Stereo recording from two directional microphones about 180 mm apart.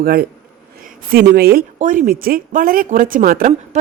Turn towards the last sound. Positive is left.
turn(degrees=-50)  # may be behind; listen again after turning